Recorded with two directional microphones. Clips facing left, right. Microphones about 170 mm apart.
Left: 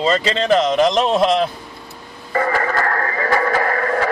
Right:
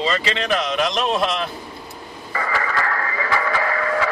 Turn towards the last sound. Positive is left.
turn(degrees=45)  # may be behind; listen again after turning